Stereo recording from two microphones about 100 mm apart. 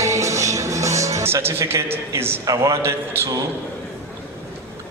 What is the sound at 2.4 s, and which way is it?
Speech, 30° right (ahead or behind).